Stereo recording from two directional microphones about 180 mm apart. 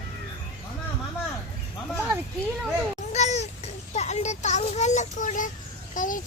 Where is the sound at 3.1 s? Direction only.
40° left (ahead or behind).